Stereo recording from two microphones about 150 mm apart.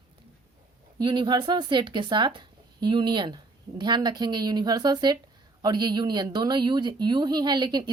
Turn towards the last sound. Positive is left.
turn(degrees=-30)  # may be behind; listen again after turning